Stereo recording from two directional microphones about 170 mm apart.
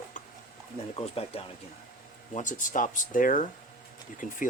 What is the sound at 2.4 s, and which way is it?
Speech, 50° left (ahead or behind).